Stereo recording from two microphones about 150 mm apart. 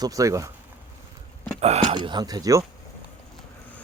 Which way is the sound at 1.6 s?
45° right (ahead or behind).